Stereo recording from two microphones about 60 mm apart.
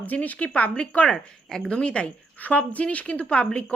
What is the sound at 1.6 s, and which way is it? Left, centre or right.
A woman's voice, centre.